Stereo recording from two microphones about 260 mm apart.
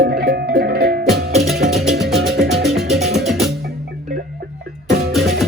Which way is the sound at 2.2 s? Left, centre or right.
Right.